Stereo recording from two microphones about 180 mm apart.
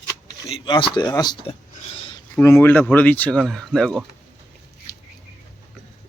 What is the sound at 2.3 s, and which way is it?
Speech, 10° left (ahead or behind).